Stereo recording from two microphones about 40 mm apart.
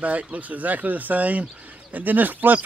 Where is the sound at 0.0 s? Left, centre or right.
Right.